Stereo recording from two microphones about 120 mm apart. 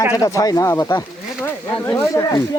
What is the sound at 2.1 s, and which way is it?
Speech, 30° left (ahead or behind).